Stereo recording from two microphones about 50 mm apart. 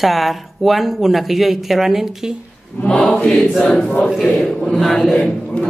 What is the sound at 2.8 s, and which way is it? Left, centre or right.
Choir, centre.